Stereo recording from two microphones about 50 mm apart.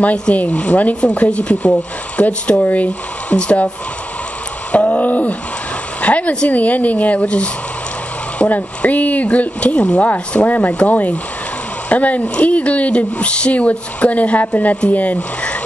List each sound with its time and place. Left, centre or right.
0.3 s speech: left
4.7 s speech: left